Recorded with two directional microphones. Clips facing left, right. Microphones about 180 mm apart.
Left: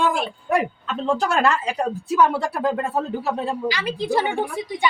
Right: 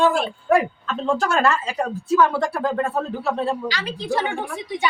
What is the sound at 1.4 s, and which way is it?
Speech, 15° left (ahead or behind).